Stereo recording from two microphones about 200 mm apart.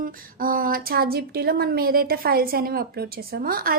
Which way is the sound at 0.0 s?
45° right (ahead or behind).